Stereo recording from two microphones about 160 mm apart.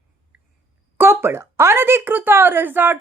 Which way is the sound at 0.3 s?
10° right (ahead or behind).